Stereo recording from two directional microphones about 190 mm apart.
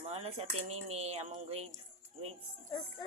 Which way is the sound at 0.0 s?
35° right (ahead or behind).